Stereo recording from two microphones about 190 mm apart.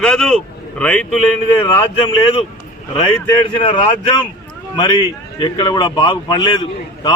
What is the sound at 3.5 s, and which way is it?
Speech, 25° left (ahead or behind).